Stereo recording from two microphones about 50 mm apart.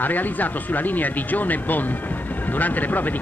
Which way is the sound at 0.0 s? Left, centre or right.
Left.